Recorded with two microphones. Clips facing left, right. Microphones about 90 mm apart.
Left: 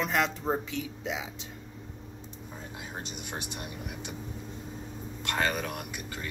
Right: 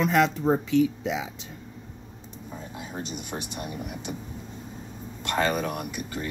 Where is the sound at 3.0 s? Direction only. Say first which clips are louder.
Right 4 dB; 25° right (ahead or behind).